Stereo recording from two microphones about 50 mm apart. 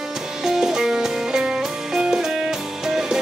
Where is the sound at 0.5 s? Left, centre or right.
Centre.